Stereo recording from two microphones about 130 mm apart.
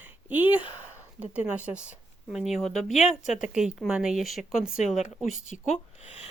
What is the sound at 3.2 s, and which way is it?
Speech, 70° left (ahead or behind).